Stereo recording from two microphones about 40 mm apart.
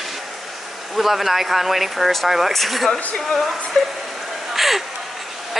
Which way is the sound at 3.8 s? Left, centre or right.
Left.